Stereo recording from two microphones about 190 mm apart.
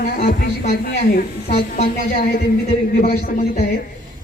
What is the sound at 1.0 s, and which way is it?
A woman's voice, 35° left (ahead or behind).